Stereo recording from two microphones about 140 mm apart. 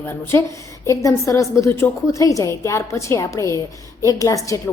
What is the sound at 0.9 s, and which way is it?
A woman's voice, 20° left (ahead or behind).